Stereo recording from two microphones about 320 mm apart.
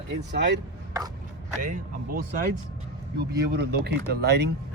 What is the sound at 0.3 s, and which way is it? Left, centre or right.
Speech, right.